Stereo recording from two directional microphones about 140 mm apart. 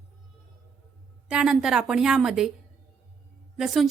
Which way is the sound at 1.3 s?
5° right (ahead or behind).